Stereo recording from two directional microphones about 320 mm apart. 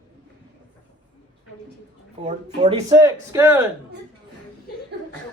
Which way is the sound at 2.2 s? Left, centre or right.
Centre.